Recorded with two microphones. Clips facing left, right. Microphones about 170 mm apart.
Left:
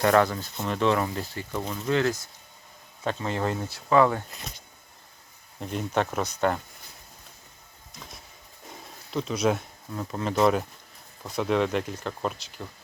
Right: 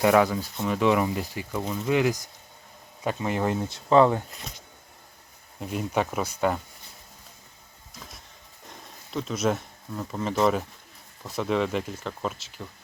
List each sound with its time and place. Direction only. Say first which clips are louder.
0.0 s speech: right 1 dB; 10° right (ahead or behind)
5.5 s speech: even; 5° right (ahead or behind)
8.6 s speech: left 2 dB; 5° left (ahead or behind)